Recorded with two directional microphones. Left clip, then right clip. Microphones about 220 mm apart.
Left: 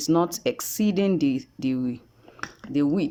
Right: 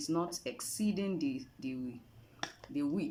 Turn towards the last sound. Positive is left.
turn(degrees=40)  # may be behind; listen again after turning